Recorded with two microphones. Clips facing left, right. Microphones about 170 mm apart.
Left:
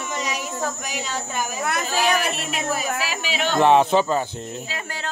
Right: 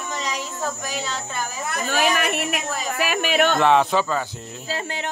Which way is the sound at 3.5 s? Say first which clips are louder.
Left 7 dB; 20° left (ahead or behind).